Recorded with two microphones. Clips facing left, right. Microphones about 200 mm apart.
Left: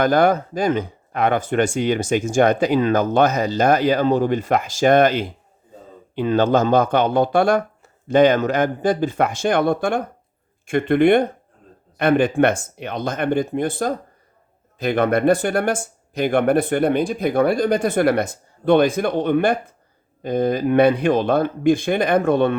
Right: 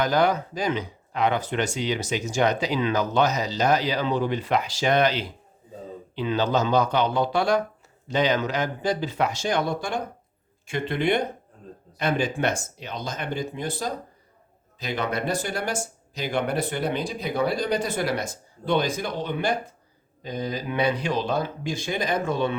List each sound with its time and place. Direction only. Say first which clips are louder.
0.0 s speech: left 6 dB; 50° left (ahead or behind)